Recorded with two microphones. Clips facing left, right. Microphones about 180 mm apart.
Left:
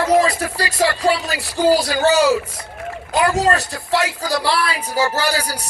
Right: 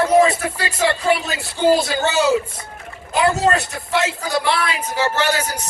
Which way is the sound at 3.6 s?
20° right (ahead or behind).